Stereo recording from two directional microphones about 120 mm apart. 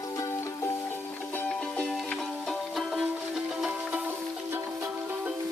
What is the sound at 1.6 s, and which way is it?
Music, 5° left (ahead or behind).